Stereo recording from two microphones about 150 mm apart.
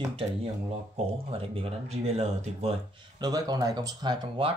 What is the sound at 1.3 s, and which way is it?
Speech, 40° right (ahead or behind).